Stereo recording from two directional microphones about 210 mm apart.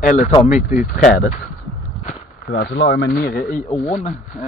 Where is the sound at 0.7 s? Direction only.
40° left (ahead or behind).